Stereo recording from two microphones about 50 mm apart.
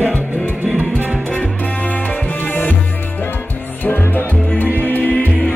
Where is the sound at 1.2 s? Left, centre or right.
Left.